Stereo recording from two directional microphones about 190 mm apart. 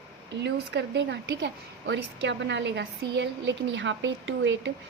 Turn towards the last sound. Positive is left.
turn(degrees=-75)  # may be behind; listen again after turning